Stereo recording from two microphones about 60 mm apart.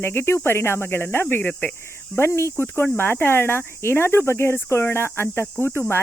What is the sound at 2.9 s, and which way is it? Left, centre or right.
Speech, left.